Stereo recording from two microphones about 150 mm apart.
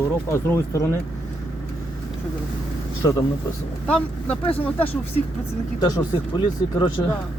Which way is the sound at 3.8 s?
10° left (ahead or behind).